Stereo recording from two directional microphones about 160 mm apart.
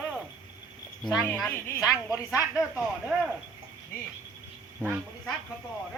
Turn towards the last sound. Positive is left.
turn(degrees=10)  # may be behind; listen again after turning